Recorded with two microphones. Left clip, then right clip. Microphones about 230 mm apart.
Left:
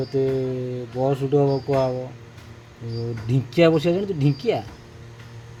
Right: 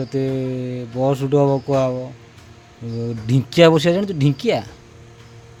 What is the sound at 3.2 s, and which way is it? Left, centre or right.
Speech, right.